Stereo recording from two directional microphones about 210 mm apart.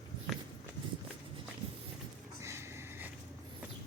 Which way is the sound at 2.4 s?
15° right (ahead or behind).